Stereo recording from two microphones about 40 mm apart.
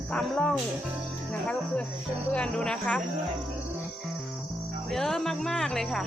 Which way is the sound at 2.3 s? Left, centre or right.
Left.